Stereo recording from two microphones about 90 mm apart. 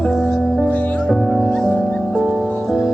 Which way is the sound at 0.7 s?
15° left (ahead or behind).